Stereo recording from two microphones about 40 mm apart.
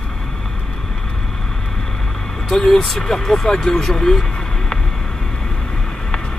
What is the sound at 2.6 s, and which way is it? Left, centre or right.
Speech, centre.